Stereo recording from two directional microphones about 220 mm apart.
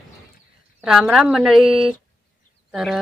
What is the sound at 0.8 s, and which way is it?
Speech, centre (ahead or behind).